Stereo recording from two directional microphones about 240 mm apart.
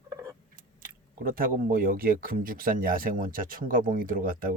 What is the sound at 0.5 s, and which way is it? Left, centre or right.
Speech, right.